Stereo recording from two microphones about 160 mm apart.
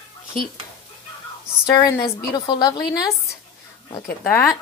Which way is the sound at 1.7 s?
25° left (ahead or behind).